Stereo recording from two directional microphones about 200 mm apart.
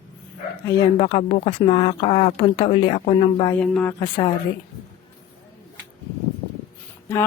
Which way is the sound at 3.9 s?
20° left (ahead or behind).